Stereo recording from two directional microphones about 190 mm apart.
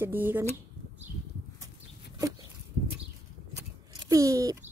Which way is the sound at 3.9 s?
15° right (ahead or behind).